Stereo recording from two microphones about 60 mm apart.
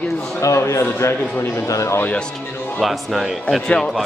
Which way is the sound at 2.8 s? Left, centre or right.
Centre.